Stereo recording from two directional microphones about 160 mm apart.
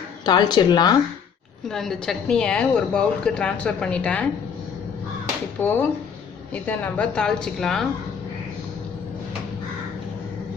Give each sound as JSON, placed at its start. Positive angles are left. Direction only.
{"t": 0.3, "sound": "speech", "side_deg": 25}
{"t": 1.7, "sound": "speech", "side_deg": 0}
{"t": 5.6, "sound": "speech", "side_deg": 10}